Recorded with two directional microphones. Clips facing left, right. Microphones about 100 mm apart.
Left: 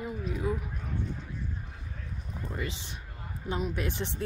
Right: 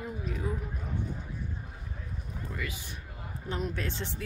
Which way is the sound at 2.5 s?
25° left (ahead or behind).